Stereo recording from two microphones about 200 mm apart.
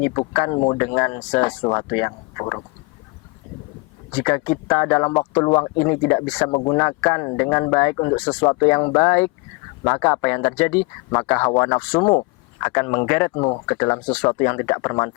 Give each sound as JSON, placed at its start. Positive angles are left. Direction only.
{"t": 0.3, "sound": "speech", "side_deg": 20}
{"t": 4.1, "sound": "speech", "side_deg": 15}
{"t": 6.5, "sound": "speech", "side_deg": 20}